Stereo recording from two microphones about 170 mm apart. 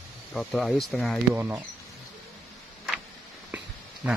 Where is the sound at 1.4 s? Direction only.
15° right (ahead or behind).